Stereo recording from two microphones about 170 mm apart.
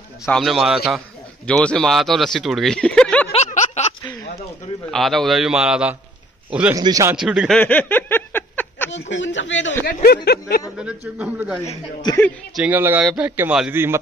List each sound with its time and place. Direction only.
0.2 s a man's voice: centre (ahead or behind)
3.3 s a sound: 40° left (ahead or behind)
4.9 s a man's voice: centre (ahead or behind)
6.7 s speech: 20° right (ahead or behind)
7.2 s a sound: 5° right (ahead or behind)
9.1 s speech: 90° left
10.0 s a sound: 70° left (ahead or behind)
10.8 s a man's voice: 5° right (ahead or behind)
12.1 s a man's voice: 25° left (ahead or behind)
12.5 s a man's voice: 10° right (ahead or behind)